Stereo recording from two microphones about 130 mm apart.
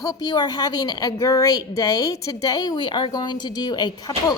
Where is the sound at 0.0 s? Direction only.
30° left (ahead or behind).